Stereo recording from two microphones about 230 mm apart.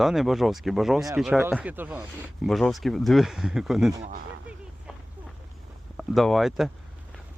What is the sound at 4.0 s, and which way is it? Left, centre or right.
Speech, right.